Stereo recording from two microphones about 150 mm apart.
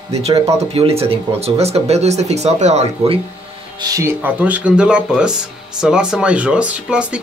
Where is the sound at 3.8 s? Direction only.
20° right (ahead or behind).